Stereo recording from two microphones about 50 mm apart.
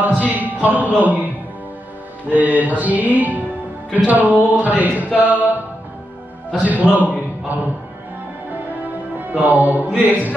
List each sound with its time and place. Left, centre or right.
0.0 s a sound: right
1.0 s music: right
2.3 s music: right
6.6 s music: right
9.3 s music: right